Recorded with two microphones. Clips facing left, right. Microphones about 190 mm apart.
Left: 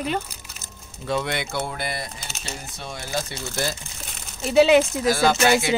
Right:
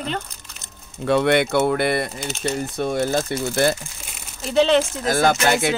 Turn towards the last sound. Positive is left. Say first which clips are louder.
# even
turn(degrees=-50)  # may be behind; listen again after turning